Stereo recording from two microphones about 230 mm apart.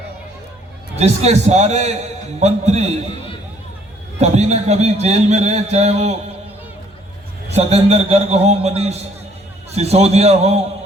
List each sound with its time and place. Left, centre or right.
0.9 s a man's voice: right
4.2 s a man's voice: right
7.5 s a man's voice: right